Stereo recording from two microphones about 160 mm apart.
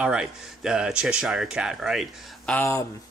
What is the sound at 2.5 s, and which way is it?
Speech, 15° left (ahead or behind).